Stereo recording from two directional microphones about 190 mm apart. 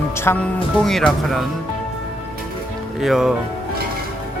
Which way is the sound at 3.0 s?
Centre (ahead or behind).